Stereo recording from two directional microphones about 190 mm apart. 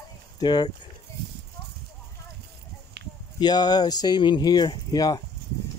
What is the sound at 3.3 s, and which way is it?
Speech, 20° left (ahead or behind).